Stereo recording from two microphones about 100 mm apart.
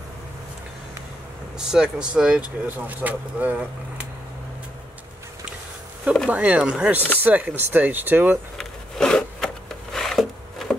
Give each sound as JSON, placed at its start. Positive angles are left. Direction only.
{"t": 1.6, "sound": "speech", "side_deg": -5}
{"t": 6.3, "sound": "speech", "side_deg": -10}
{"t": 8.5, "sound": "wood", "side_deg": 5}